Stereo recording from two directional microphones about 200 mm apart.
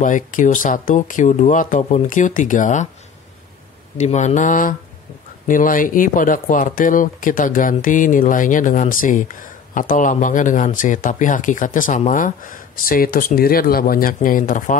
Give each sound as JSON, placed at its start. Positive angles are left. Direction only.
{"t": 0.0, "sound": "speech", "side_deg": 40}
{"t": 4.0, "sound": "speech", "side_deg": 35}